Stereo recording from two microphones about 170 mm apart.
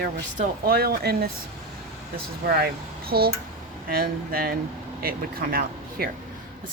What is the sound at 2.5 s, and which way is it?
Speech, 65° right (ahead or behind).